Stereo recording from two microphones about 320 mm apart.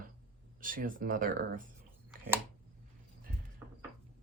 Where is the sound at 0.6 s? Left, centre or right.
Right.